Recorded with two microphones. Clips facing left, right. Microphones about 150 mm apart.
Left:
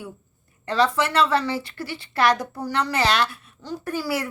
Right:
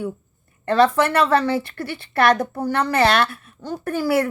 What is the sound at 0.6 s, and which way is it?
A woman's voice, 55° right (ahead or behind).